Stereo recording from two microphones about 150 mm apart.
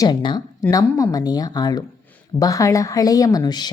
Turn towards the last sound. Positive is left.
turn(degrees=25)  # may be behind; listen again after turning